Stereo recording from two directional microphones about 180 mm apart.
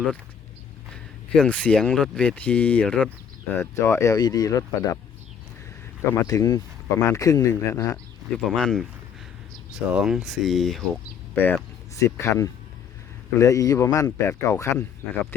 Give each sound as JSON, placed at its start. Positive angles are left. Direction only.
{"t": 1.4, "sound": "speech", "side_deg": 5}
{"t": 6.1, "sound": "speech", "side_deg": 20}
{"t": 8.4, "sound": "speech", "side_deg": 0}
{"t": 11.3, "sound": "speech", "side_deg": 10}